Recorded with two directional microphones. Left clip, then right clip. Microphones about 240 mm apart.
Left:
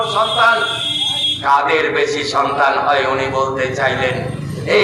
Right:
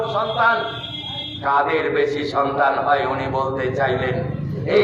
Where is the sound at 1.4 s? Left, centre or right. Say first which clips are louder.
Left 3 dB; left.